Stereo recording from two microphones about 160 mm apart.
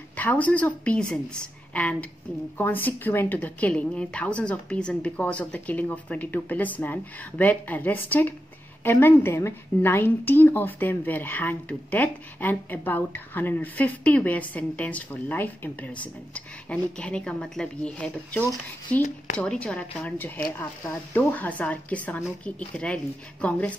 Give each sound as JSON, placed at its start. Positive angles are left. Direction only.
{"t": 0.1, "sound": "a woman's voice", "side_deg": 10}